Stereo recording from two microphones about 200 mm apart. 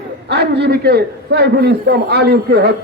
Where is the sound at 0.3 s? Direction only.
55° right (ahead or behind).